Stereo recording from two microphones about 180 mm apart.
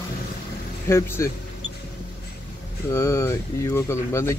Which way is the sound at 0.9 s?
15° left (ahead or behind).